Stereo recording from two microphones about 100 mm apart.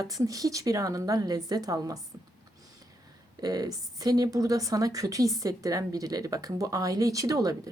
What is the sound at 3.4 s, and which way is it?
A woman's voice, 40° right (ahead or behind).